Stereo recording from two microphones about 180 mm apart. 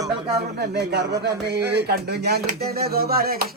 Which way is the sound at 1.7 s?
60° right (ahead or behind).